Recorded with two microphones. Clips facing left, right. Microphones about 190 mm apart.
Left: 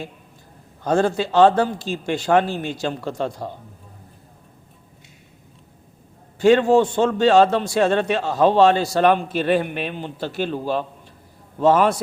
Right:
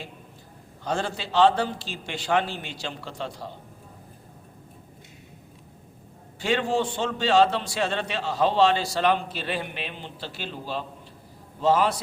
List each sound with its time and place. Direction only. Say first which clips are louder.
0.9 s a man's voice: left 10 dB; 45° left (ahead or behind)
6.4 s a man's voice: left 10 dB; 45° left (ahead or behind)